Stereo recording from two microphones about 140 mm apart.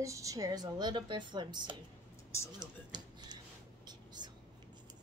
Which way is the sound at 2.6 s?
30° right (ahead or behind).